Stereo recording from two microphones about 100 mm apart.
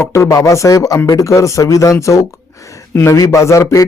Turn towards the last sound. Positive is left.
turn(degrees=35)  # may be behind; listen again after turning